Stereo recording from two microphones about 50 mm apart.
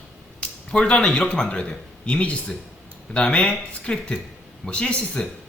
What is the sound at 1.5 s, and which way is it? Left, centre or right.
A man's voice, left.